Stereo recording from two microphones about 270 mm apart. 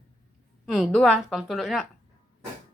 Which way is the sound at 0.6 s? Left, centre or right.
Centre.